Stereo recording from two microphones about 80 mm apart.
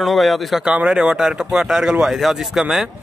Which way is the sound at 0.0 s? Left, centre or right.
Centre.